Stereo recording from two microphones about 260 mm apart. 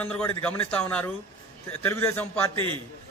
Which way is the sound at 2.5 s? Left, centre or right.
Centre.